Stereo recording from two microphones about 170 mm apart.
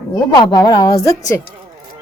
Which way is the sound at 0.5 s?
20° left (ahead or behind).